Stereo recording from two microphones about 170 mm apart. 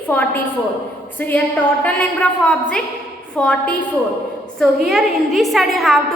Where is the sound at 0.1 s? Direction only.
10° left (ahead or behind).